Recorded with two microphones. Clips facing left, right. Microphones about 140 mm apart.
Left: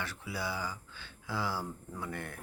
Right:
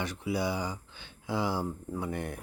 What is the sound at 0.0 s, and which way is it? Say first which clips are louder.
Speech: right 7 dB; 15° right (ahead or behind).